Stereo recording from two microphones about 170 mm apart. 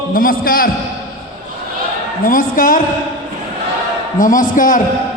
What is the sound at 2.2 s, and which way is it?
Speech, 55° left (ahead or behind).